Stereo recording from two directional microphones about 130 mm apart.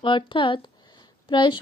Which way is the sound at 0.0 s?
40° left (ahead or behind).